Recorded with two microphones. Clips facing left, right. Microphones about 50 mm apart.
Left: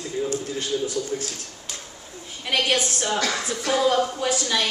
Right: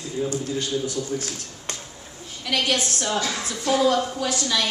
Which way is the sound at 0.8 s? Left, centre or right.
Right.